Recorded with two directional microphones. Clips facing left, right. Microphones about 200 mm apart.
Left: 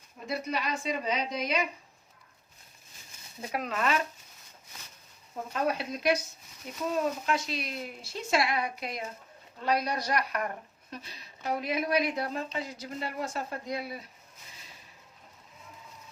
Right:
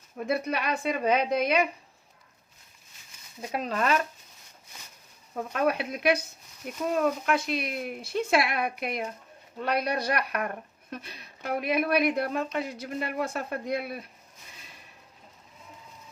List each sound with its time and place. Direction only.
0.3 s speech: 60° right (ahead or behind)
3.5 s speech: 30° right (ahead or behind)
5.5 s speech: 60° right (ahead or behind)